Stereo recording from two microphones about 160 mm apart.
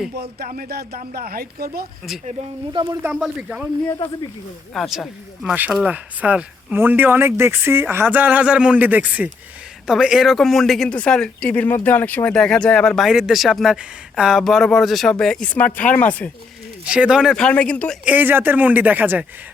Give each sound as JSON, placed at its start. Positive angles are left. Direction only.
{"t": 0.2, "sound": "speech", "side_deg": -70}
{"t": 3.0, "sound": "speech", "side_deg": -5}
{"t": 4.7, "sound": "speech", "side_deg": 0}
{"t": 16.8, "sound": "speech", "side_deg": -5}
{"t": 18.0, "sound": "speech", "side_deg": -10}